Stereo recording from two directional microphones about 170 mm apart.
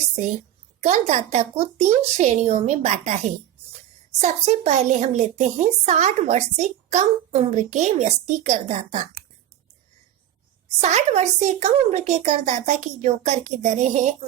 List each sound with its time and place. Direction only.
0.8 s speech: 40° right (ahead or behind)
4.2 s a woman's voice: 40° right (ahead or behind)
10.8 s a woman's voice: 40° right (ahead or behind)